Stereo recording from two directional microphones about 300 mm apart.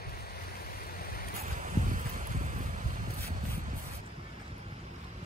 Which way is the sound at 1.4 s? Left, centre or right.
Right.